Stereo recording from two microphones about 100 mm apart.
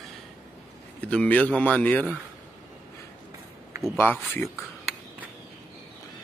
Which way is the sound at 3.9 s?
20° left (ahead or behind).